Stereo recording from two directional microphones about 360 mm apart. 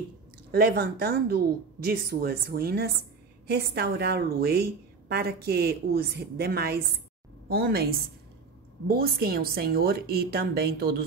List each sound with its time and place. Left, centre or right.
0.5 s a woman's voice: right